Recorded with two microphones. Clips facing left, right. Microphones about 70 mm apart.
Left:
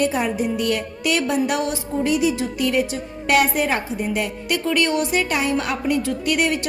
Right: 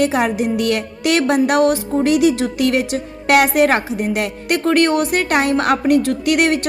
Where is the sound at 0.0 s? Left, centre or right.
Right.